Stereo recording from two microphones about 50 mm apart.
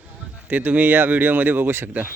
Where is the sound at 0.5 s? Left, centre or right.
Right.